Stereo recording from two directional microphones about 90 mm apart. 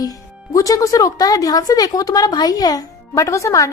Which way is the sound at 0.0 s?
40° left (ahead or behind).